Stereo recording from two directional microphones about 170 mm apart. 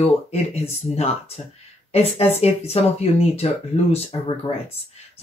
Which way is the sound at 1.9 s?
35° left (ahead or behind).